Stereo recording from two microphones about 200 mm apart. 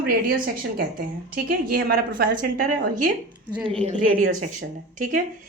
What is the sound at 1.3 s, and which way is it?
Speech, 50° right (ahead or behind).